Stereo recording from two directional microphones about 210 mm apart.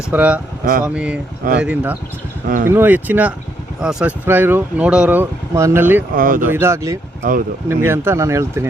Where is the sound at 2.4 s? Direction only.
40° right (ahead or behind).